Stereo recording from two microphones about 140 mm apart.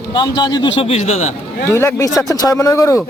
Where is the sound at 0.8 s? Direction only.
50° left (ahead or behind).